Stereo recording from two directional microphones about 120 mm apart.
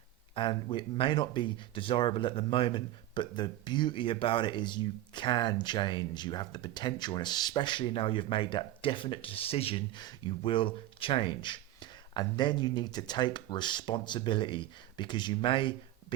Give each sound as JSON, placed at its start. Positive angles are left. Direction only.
{"t": 0.3, "sound": "speech", "side_deg": 45}